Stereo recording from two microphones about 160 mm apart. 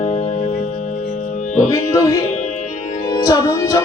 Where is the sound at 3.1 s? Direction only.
20° left (ahead or behind).